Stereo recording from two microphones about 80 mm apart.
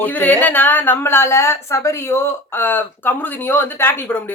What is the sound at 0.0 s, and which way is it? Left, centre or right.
A woman's voice, left.